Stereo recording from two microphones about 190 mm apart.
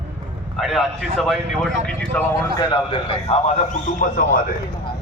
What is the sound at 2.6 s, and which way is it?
A man's voice, 25° left (ahead or behind).